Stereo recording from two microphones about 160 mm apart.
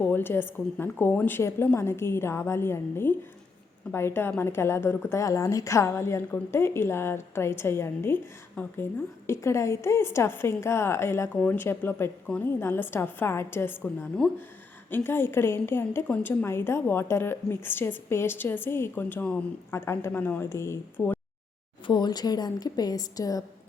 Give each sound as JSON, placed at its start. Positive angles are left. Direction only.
{"t": 0.0, "sound": "a woman's voice", "side_deg": 15}
{"t": 21.8, "sound": "a woman's voice", "side_deg": 25}